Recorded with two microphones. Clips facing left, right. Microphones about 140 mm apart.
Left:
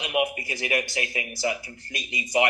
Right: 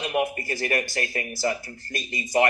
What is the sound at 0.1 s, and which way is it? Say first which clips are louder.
Speech: left 2 dB; 10° left (ahead or behind).